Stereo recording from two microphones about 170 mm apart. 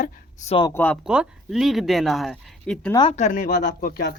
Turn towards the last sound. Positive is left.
turn(degrees=60)  # may be behind; listen again after turning